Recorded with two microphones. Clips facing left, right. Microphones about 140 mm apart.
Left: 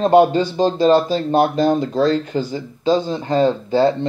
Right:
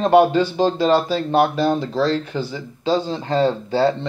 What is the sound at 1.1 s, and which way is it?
Speech, 20° left (ahead or behind).